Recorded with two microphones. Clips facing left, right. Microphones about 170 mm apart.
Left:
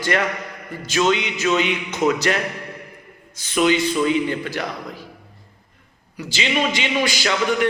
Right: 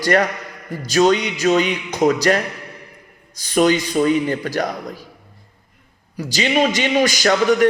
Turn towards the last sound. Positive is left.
turn(degrees=-45)  # may be behind; listen again after turning